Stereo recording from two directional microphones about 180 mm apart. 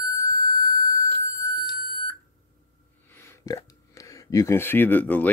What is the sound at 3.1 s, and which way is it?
Speech, 15° left (ahead or behind).